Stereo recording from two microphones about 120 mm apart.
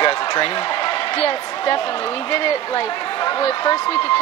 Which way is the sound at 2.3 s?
50° left (ahead or behind).